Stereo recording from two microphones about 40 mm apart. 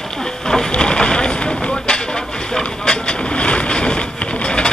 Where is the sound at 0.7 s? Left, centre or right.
Left.